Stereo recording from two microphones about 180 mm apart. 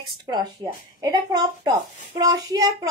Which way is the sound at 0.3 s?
20° right (ahead or behind).